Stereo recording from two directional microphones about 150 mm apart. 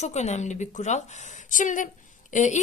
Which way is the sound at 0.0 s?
50° left (ahead or behind).